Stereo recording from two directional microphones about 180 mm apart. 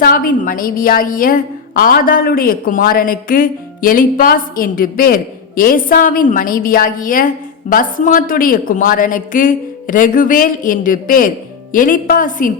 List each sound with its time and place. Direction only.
0.0 s a woman's voice: 50° left (ahead or behind)